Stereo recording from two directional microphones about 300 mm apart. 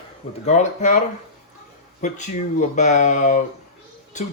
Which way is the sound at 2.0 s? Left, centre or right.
Left.